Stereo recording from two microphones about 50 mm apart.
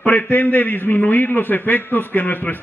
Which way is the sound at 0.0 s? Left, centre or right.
Left.